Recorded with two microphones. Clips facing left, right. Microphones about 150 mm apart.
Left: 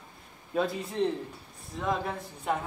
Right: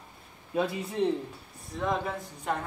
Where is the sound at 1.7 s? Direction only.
Centre (ahead or behind).